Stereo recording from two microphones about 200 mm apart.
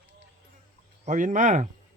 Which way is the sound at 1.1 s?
40° right (ahead or behind).